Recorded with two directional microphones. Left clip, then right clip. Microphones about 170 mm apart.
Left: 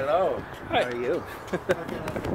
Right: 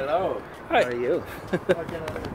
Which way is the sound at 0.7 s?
50° right (ahead or behind).